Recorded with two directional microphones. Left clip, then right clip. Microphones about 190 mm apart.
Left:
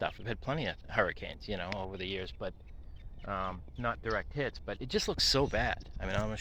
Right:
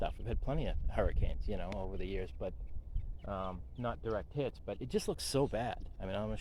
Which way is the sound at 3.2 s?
25° left (ahead or behind).